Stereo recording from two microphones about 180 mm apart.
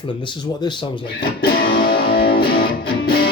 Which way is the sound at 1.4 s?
55° left (ahead or behind).